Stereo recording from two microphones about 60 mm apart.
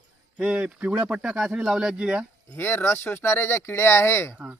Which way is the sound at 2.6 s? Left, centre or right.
Left.